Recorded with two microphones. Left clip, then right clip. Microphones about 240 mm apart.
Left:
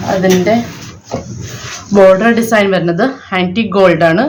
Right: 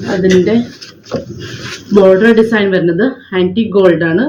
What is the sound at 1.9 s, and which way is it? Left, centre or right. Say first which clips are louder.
A woman's voice: even; left.